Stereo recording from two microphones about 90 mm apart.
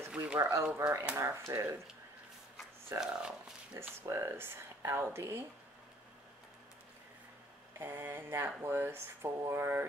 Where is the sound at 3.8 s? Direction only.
30° right (ahead or behind).